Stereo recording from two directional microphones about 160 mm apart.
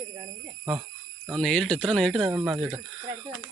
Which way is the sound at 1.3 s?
5° left (ahead or behind).